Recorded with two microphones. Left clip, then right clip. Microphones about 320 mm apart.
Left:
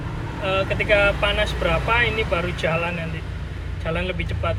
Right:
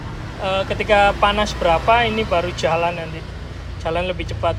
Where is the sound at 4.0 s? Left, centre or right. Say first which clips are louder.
Right 4 dB; centre.